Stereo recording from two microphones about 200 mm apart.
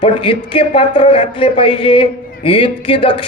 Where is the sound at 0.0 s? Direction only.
25° left (ahead or behind).